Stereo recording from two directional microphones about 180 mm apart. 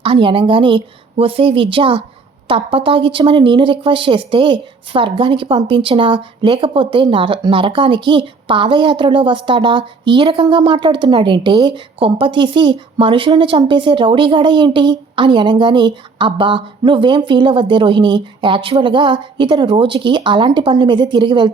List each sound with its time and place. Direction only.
0.0 s speech: 30° right (ahead or behind)